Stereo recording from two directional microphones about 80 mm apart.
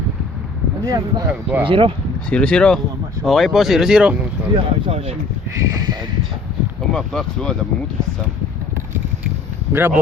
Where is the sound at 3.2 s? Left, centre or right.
Centre.